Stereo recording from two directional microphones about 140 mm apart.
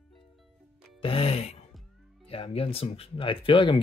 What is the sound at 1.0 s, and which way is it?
Music, 45° left (ahead or behind).